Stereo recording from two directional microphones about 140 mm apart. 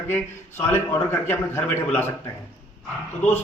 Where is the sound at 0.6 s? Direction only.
15° left (ahead or behind).